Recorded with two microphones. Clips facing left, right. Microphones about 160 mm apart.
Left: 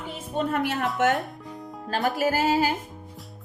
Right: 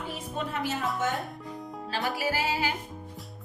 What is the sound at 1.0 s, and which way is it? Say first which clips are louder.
Speech: left 9 dB; 75° left (ahead or behind).